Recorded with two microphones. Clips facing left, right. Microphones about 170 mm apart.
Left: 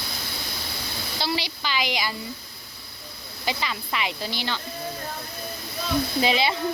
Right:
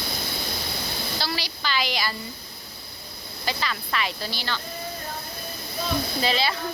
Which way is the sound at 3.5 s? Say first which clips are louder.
Even; 15° left (ahead or behind).